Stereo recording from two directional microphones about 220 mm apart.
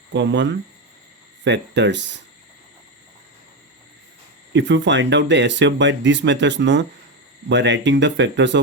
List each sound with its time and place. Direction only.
0.1 s speech: 55° right (ahead or behind)
1.5 s speech: 50° right (ahead or behind)
4.5 s speech: 55° right (ahead or behind)